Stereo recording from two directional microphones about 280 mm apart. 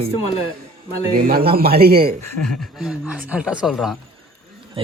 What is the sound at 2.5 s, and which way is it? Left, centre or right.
Speech, centre.